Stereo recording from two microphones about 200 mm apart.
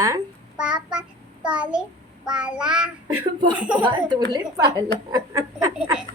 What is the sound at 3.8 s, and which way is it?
A woman's voice, 20° right (ahead or behind).